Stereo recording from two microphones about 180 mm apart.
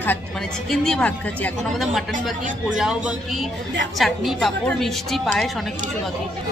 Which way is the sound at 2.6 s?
5° right (ahead or behind).